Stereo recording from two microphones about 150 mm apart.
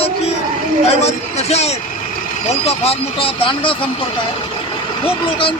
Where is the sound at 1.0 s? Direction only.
45° left (ahead or behind).